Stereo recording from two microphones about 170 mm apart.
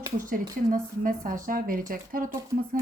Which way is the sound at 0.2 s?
50° right (ahead or behind).